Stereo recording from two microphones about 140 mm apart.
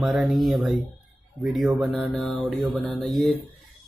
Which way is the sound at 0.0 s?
Centre (ahead or behind).